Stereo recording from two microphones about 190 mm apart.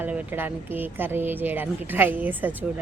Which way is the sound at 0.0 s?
10° right (ahead or behind).